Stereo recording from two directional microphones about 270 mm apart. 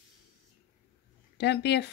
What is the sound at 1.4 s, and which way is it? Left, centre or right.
Speech, left.